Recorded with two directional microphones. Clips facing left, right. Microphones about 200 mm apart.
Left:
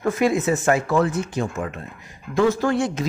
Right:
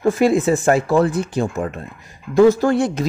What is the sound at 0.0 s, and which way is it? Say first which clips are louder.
Speech: right 5 dB; 30° right (ahead or behind).